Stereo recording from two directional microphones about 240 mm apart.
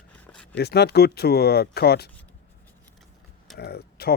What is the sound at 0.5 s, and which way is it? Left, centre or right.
Speech, left.